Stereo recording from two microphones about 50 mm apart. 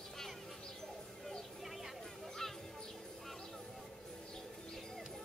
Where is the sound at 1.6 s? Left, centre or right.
Centre.